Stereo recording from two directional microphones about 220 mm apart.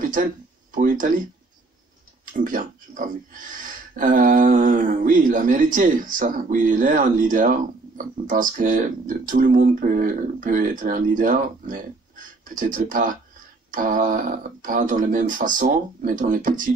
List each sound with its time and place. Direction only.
0.1 s speech: 35° right (ahead or behind)
2.3 s speech: 35° right (ahead or behind)